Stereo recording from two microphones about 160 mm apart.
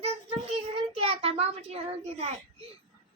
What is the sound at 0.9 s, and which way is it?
A child's voice, 35° right (ahead or behind).